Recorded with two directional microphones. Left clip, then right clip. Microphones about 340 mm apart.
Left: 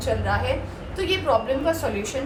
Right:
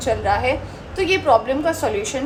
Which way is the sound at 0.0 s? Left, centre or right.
Centre.